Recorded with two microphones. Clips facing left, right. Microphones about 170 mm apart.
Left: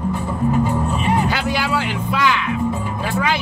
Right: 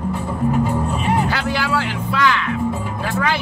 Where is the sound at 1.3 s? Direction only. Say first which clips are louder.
Even; 15° left (ahead or behind).